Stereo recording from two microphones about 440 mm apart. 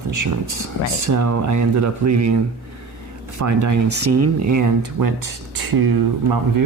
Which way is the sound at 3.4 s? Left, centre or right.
Right.